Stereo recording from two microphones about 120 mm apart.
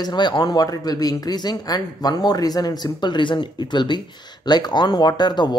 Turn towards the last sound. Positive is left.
turn(degrees=35)  # may be behind; listen again after turning